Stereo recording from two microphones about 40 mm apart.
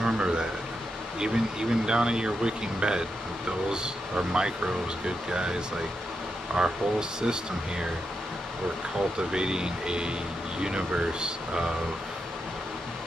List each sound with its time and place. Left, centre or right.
0.0 s a sound: right
1.2 s speech: centre
9.3 s speech: centre